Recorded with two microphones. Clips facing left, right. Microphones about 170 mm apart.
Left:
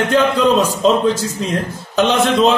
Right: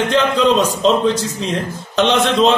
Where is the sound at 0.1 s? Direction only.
10° left (ahead or behind).